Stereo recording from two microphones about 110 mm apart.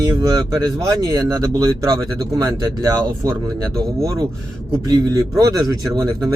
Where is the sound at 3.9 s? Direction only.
35° right (ahead or behind).